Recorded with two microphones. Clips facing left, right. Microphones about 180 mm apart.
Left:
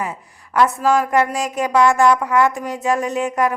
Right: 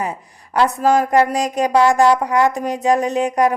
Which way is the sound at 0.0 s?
35° right (ahead or behind).